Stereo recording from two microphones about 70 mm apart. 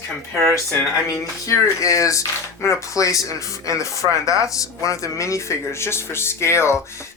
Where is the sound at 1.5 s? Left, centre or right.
Left.